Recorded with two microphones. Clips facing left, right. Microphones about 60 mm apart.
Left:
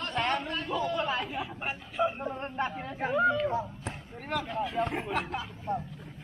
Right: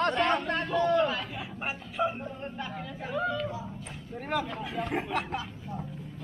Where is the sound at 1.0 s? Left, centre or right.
Left.